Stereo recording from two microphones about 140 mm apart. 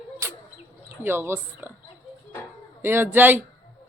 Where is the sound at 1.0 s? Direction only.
15° right (ahead or behind).